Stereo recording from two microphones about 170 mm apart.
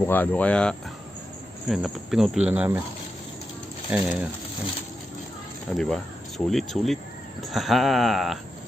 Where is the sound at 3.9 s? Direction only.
5° right (ahead or behind).